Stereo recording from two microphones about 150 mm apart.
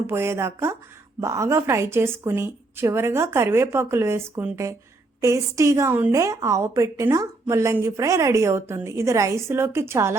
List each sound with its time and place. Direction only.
0.1 s a woman's voice: 15° right (ahead or behind)